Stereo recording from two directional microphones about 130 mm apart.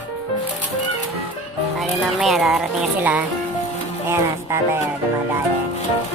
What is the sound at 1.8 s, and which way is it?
Music, centre (ahead or behind).